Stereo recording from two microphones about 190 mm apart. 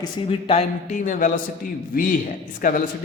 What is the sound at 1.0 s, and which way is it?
A man's voice, 45° left (ahead or behind).